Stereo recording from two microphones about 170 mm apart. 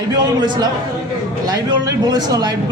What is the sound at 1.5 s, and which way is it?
Speech, 25° right (ahead or behind).